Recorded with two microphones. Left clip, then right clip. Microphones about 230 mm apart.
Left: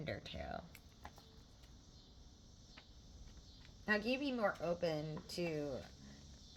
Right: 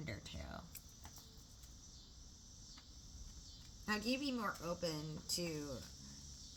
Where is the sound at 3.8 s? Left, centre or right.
Centre.